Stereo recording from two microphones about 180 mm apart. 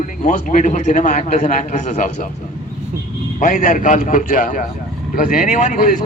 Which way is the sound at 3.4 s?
45° left (ahead or behind).